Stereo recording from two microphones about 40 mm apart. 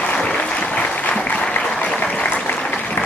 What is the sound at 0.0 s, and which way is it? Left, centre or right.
Applause, left.